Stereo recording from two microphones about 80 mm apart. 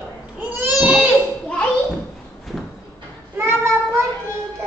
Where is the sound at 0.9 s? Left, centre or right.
Right.